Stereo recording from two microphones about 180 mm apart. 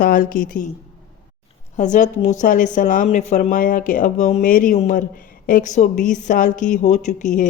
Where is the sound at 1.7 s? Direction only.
45° left (ahead or behind).